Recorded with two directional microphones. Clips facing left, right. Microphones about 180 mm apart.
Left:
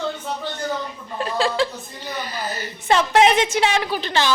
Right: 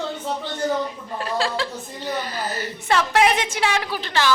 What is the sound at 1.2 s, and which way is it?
A woman's voice, 20° left (ahead or behind).